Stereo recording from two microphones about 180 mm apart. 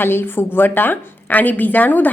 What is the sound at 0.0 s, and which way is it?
A woman's voice, 10° left (ahead or behind).